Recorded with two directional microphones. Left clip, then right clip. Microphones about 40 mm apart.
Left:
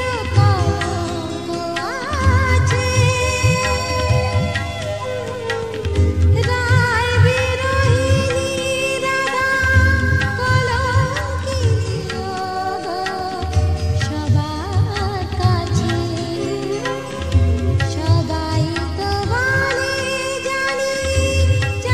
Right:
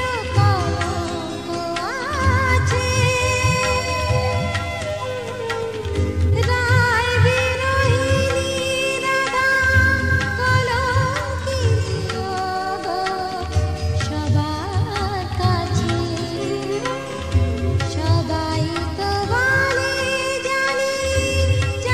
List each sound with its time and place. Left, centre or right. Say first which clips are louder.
0.4 s music: even; left
2.1 s music of bollywood: right 1 dB; left
2.7 s music: left 1 dB; left
6.3 s music: even; centre
19.0 s music: right 1 dB; left